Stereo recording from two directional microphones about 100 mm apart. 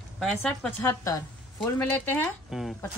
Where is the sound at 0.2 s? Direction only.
Centre (ahead or behind).